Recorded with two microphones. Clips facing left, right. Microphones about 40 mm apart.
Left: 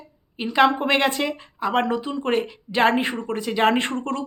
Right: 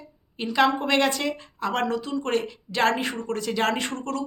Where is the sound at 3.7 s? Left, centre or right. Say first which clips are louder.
Left 4 dB; left.